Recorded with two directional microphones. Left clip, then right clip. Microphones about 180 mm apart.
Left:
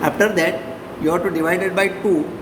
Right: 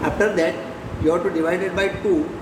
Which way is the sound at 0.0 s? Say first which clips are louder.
Left 2 dB; 55° left (ahead or behind).